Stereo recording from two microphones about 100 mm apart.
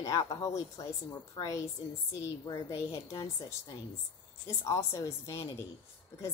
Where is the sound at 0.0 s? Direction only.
40° left (ahead or behind).